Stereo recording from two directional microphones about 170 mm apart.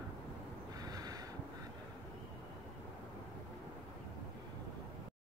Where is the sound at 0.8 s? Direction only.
25° right (ahead or behind).